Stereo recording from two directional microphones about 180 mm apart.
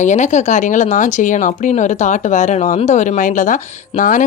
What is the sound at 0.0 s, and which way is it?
Speech, 40° left (ahead or behind).